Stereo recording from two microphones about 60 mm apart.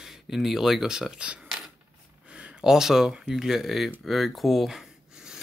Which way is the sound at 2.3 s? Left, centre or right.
Centre.